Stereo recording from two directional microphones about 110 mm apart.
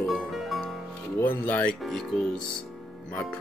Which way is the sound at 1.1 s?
20° left (ahead or behind).